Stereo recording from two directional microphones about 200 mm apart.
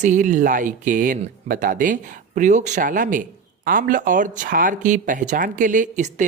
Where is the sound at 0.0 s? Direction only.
40° right (ahead or behind).